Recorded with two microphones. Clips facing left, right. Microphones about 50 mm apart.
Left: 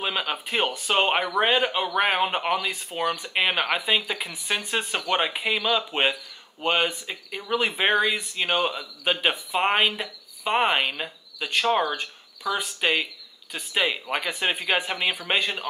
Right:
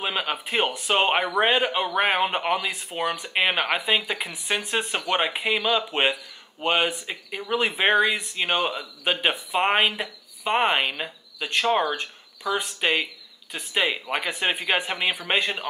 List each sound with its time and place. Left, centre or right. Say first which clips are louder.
0.0 s speech: even; centre